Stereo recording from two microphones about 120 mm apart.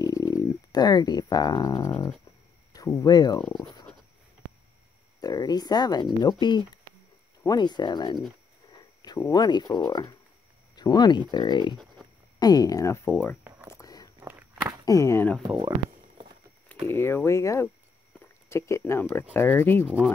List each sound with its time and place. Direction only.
0.0 s dog: 30° left (ahead or behind)
2.7 s speech: 30° left (ahead or behind)
5.2 s speech: 30° left (ahead or behind)
9.3 s speech: 35° left (ahead or behind)
13.1 s speech: 15° left (ahead or behind)
13.7 s a sound: 30° left (ahead or behind)
14.2 s walk: 15° right (ahead or behind)
14.9 s speech: 25° left (ahead or behind)
15.4 s speech: 35° right (ahead or behind)
16.8 s speech: 20° left (ahead or behind)